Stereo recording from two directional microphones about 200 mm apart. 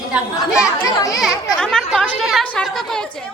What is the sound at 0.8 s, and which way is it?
Speech, 15° left (ahead or behind).